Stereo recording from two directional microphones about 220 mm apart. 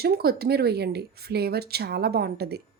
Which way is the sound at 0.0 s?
45° right (ahead or behind).